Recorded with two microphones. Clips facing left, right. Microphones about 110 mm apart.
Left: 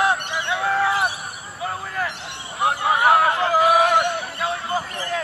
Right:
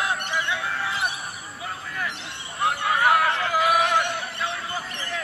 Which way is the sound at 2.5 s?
25° left (ahead or behind).